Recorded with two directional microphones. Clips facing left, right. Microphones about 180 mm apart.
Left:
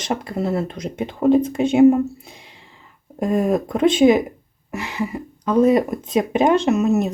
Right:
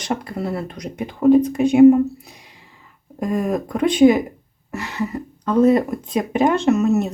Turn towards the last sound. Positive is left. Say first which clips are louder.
# right 1 dB
turn(degrees=15)  # may be behind; listen again after turning